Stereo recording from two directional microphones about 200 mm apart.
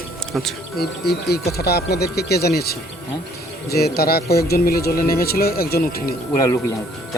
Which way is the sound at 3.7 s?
50° left (ahead or behind).